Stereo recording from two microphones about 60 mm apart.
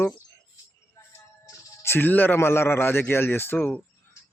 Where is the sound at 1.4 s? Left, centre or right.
Left.